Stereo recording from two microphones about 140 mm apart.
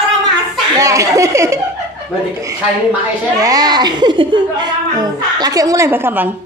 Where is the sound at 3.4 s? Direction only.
25° right (ahead or behind).